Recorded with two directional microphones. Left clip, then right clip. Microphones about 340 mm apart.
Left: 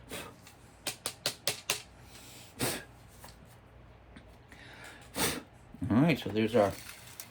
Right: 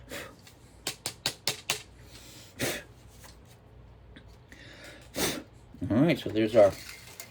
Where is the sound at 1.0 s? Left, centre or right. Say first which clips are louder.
Right 2 dB; centre.